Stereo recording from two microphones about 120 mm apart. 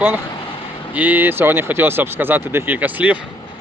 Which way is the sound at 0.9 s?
15° right (ahead or behind).